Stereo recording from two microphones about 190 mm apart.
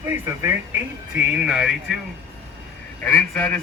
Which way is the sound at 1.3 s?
5° right (ahead or behind).